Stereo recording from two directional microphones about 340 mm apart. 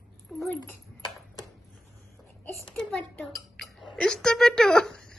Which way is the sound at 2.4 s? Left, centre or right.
Centre.